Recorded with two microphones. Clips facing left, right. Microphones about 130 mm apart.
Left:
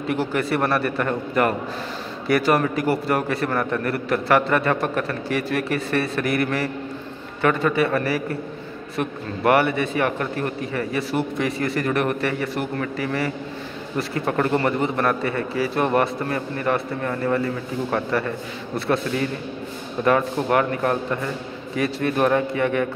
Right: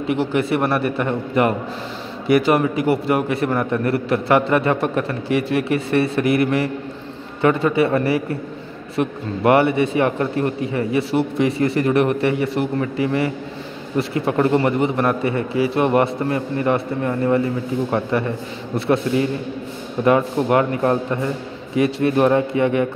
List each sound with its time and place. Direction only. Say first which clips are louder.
0.1 s a man's voice: right 3 dB; 20° right (ahead or behind)